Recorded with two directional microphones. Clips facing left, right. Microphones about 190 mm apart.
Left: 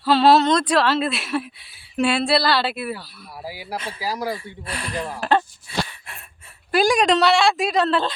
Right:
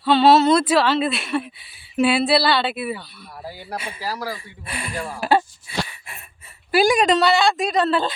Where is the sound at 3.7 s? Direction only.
10° right (ahead or behind).